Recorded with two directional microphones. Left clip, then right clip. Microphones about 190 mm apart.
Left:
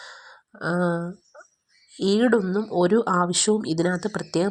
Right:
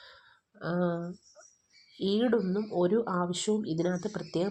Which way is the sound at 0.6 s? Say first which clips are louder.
Left 7 dB; 25° left (ahead or behind).